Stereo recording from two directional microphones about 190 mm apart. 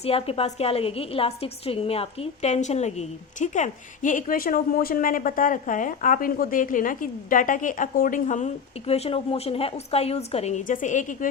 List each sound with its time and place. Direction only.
0.0 s a woman's voice: 30° left (ahead or behind)